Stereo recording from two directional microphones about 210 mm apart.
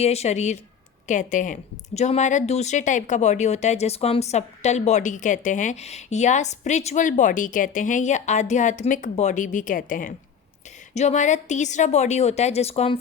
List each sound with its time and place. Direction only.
0.0 s a woman's voice: 30° left (ahead or behind)